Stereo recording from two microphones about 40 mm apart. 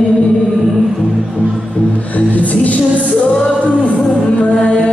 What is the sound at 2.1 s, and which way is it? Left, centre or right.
Music, left.